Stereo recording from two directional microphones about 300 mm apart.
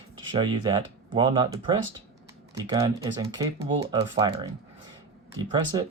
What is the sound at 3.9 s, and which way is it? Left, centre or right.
Speech, centre.